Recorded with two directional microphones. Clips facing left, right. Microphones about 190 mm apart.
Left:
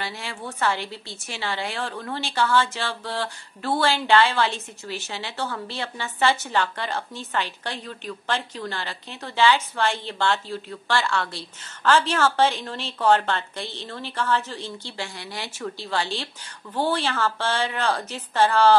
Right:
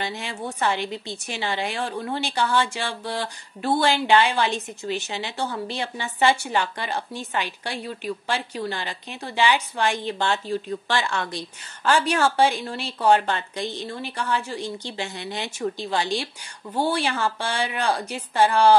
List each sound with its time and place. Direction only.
0.0 s a woman's voice: 20° right (ahead or behind)